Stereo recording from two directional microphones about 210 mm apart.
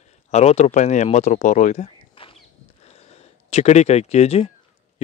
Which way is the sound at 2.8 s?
30° left (ahead or behind).